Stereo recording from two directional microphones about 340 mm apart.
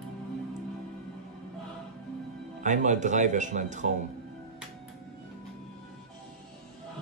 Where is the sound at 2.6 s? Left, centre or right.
Right.